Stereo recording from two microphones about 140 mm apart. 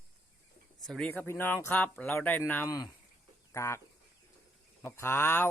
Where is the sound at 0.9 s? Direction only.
10° left (ahead or behind).